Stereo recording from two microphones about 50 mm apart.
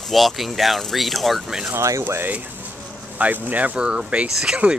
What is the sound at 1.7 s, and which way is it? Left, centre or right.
Speech, right.